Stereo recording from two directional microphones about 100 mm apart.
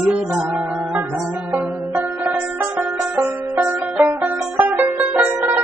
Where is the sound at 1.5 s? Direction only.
15° right (ahead or behind).